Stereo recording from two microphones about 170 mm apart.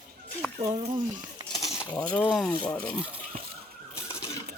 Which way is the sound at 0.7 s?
35° right (ahead or behind).